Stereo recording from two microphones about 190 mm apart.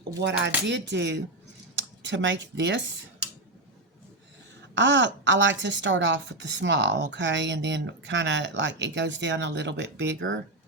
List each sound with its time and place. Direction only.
0.2 s a woman's voice: 70° right (ahead or behind)
4.7 s a woman's voice: 70° right (ahead or behind)